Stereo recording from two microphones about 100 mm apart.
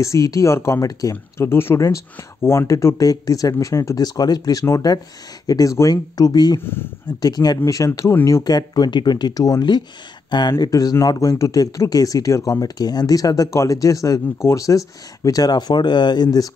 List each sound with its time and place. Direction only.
0.0 s speech: 30° left (ahead or behind)
6.6 s speech: 20° left (ahead or behind)
7.2 s speech: 40° left (ahead or behind); by 8.5 s 25° left (ahead or behind)
8.5 s speech: 40° left (ahead or behind)